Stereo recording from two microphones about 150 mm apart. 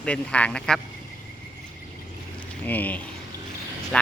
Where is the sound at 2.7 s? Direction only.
10° left (ahead or behind).